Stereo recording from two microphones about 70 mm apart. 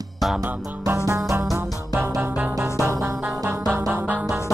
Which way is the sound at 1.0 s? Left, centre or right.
Right.